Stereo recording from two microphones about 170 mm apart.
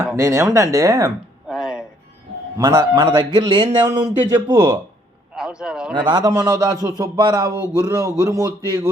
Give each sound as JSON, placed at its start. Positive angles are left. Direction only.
{"t": 0.0, "sound": "speech", "side_deg": -15}
{"t": 1.5, "sound": "music", "side_deg": -5}
{"t": 2.6, "sound": "speech", "side_deg": -25}
{"t": 3.8, "sound": "a man's voice", "side_deg": -15}
{"t": 5.3, "sound": "speech", "side_deg": -5}
{"t": 5.9, "sound": "speech", "side_deg": -25}